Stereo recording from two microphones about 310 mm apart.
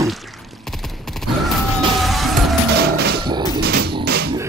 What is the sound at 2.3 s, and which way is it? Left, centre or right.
Music, right.